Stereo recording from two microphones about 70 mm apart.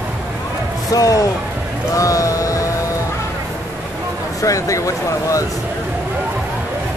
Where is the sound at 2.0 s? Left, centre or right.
Left.